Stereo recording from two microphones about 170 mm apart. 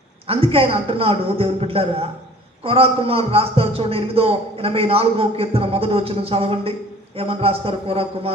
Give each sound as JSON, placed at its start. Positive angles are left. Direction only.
{"t": 0.3, "sound": "a man's voice", "side_deg": -35}